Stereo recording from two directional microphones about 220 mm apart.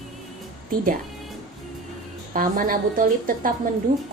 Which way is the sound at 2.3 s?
40° right (ahead or behind).